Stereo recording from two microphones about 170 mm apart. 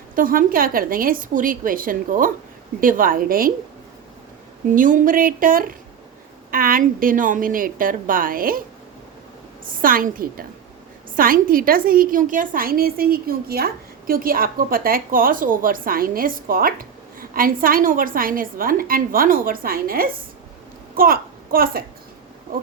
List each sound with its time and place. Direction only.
0.2 s a woman's voice: 55° right (ahead or behind)
4.7 s a woman's voice: 50° right (ahead or behind)
9.7 s a woman's voice: 55° right (ahead or behind)